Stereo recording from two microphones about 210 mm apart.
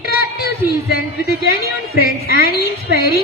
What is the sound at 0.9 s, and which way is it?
A woman's voice, 45° left (ahead or behind).